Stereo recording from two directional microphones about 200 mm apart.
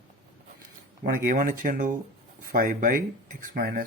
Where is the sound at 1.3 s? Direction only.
45° right (ahead or behind).